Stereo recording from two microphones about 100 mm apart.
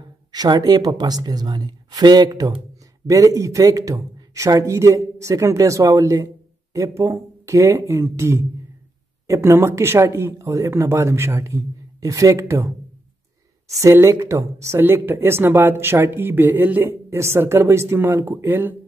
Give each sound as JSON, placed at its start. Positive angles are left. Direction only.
{"t": 0.0, "sound": "a man's voice", "side_deg": -45}
{"t": 13.9, "sound": "speech", "side_deg": -30}